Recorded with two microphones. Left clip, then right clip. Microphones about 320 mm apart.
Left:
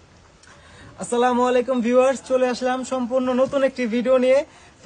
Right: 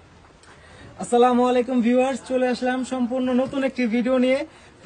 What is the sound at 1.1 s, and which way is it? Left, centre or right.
Speech, centre.